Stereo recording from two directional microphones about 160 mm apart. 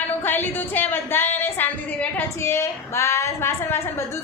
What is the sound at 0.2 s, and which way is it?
A woman's voice, 10° left (ahead or behind).